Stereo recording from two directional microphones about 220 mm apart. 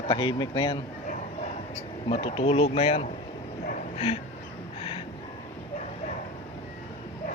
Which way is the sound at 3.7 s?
30° left (ahead or behind).